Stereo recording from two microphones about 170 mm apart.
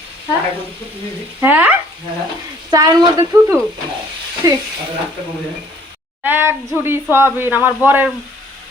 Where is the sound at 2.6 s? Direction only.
20° right (ahead or behind).